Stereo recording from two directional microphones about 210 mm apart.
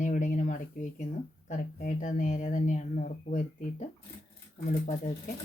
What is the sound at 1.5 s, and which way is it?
Speech, 35° left (ahead or behind).